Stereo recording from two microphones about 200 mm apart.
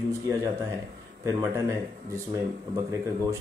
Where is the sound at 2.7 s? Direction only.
15° right (ahead or behind).